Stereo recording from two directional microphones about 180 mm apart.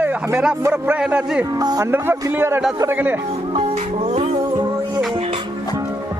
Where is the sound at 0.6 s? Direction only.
10° right (ahead or behind).